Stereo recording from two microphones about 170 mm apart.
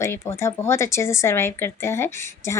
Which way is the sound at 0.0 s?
15° left (ahead or behind).